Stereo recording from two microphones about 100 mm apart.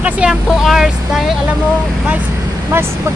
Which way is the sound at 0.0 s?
10° right (ahead or behind).